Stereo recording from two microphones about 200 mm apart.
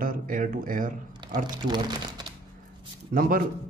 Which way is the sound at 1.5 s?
20° right (ahead or behind).